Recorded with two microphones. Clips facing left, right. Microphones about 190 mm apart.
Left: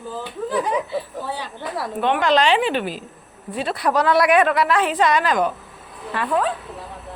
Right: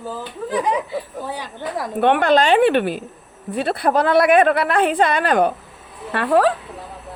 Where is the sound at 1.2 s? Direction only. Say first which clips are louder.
Right 1 dB; 15° right (ahead or behind).